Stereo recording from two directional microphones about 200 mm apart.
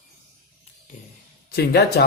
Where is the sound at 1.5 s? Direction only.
50° left (ahead or behind).